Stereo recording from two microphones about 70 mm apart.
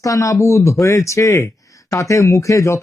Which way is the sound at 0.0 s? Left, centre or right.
Left.